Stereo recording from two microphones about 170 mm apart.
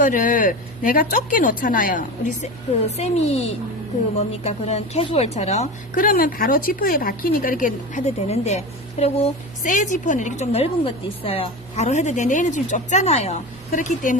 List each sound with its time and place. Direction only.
0.0 s a woman's voice: 50° left (ahead or behind)
13.7 s a woman's voice: 50° left (ahead or behind)